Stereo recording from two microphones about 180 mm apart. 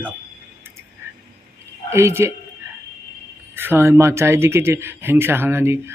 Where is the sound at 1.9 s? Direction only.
15° right (ahead or behind).